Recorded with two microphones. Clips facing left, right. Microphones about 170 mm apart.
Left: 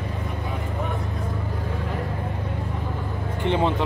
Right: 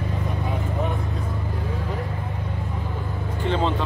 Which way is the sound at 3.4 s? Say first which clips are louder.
Left 1 dB; 15° left (ahead or behind).